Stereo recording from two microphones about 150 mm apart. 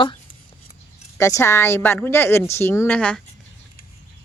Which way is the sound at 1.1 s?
20° left (ahead or behind).